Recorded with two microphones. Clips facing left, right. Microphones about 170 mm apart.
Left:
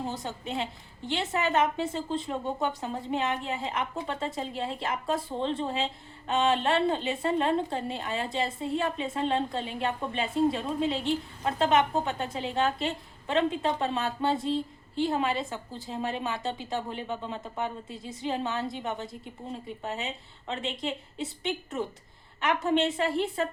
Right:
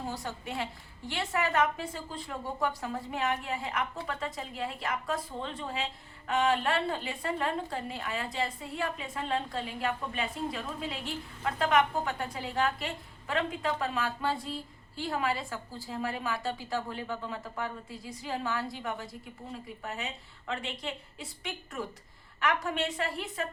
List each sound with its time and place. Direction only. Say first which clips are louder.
0.0 s a woman's voice: left 3 dB; 20° left (ahead or behind)